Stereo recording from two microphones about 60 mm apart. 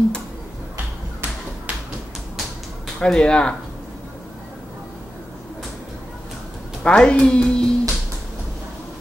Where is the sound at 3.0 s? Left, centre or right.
Centre.